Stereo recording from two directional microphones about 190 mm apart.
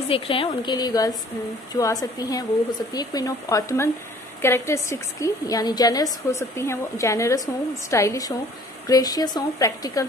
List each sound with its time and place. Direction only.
0.1 s a woman's voice: 30° left (ahead or behind)